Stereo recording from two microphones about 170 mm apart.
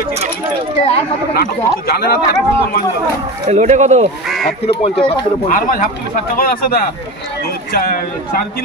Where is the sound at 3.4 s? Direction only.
45° right (ahead or behind).